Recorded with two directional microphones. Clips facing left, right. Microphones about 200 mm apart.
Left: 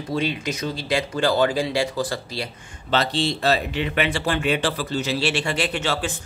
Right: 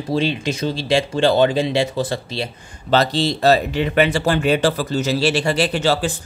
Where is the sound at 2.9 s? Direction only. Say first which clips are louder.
Right 5 dB; 40° right (ahead or behind).